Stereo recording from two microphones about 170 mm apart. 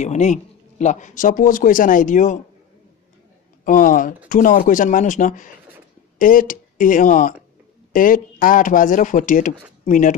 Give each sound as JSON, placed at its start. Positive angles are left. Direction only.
{"t": 0.0, "sound": "speech", "side_deg": 45}
{"t": 3.6, "sound": "speech", "side_deg": 55}